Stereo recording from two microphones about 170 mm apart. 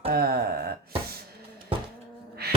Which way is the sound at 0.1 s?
65° right (ahead or behind).